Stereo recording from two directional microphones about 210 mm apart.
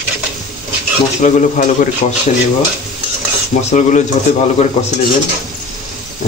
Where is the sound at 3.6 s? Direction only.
35° left (ahead or behind).